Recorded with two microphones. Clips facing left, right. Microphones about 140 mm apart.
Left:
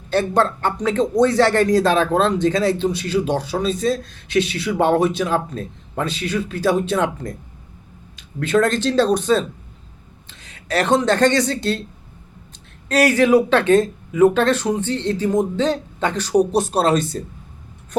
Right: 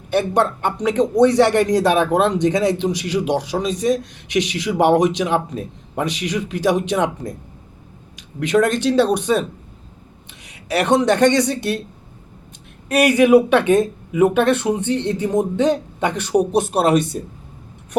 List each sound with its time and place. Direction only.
0.1 s speech: 15° right (ahead or behind)
8.4 s speech: 15° right (ahead or behind)
12.9 s speech: 15° right (ahead or behind)